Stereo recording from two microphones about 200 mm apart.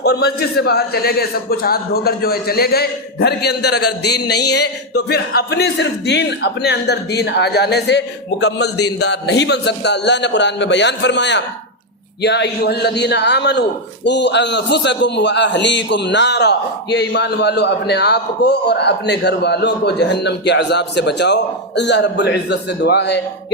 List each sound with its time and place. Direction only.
0.0 s a man's voice: 55° left (ahead or behind)